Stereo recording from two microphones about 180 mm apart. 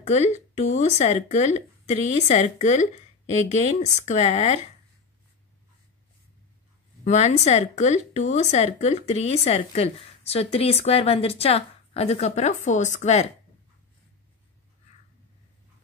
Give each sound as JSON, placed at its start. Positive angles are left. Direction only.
{"t": 0.0, "sound": "speech", "side_deg": 40}
{"t": 7.1, "sound": "speech", "side_deg": 40}